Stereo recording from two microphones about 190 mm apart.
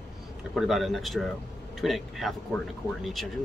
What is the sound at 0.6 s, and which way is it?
Speech, centre (ahead or behind).